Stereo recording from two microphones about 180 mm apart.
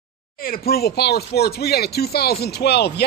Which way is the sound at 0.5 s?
60° left (ahead or behind).